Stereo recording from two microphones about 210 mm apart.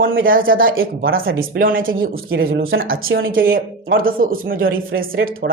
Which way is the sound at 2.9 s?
70° right (ahead or behind).